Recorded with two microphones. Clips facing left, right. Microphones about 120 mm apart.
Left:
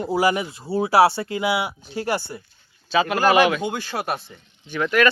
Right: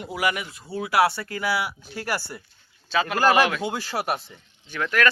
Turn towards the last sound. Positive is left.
turn(degrees=10)  # may be behind; listen again after turning